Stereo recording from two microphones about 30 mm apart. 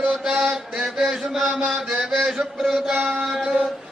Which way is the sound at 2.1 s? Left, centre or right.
Centre.